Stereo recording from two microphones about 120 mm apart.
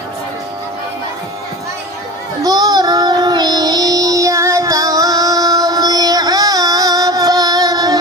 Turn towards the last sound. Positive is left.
turn(degrees=-30)  # may be behind; listen again after turning